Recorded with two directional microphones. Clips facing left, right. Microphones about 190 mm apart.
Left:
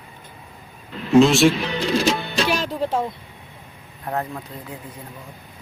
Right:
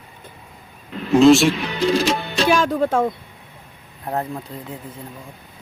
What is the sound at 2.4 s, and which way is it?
Speech, 50° right (ahead or behind).